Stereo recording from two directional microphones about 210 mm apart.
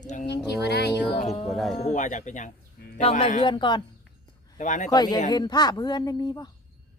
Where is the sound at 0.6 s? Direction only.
50° left (ahead or behind).